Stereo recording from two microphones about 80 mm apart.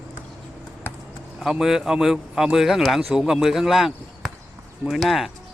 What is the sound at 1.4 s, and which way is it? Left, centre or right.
A man's voice, centre.